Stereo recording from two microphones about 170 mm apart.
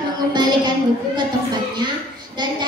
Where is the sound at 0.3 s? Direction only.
25° right (ahead or behind).